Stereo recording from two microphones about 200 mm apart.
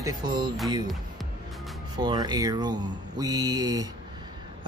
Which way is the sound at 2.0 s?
20° right (ahead or behind).